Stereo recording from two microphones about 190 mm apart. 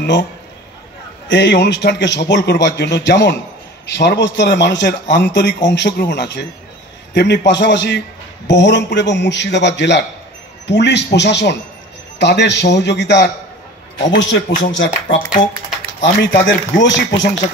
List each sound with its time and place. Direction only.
0.0 s a man's voice: 70° left (ahead or behind)
1.3 s a man's voice: 65° left (ahead or behind)